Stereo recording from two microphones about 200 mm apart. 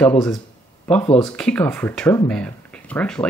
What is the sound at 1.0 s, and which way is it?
Speech, 25° left (ahead or behind).